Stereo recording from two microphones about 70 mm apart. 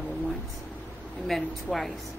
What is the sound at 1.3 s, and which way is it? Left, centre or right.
Speech, centre.